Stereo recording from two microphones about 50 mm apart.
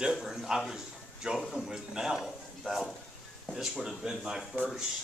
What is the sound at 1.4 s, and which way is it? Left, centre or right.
A man's voice, centre.